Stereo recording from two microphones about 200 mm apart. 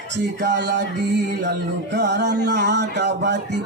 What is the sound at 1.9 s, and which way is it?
Speech, 60° right (ahead or behind).